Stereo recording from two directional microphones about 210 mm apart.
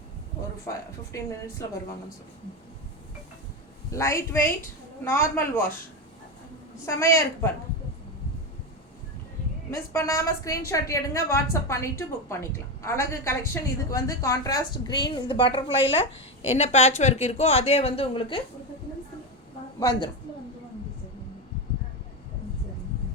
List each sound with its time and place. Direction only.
1.1 s a woman's voice: 15° left (ahead or behind)
3.9 s a woman's voice: 15° left (ahead or behind)
6.8 s a woman's voice: 15° left (ahead or behind)
9.7 s a woman's voice: 15° left (ahead or behind)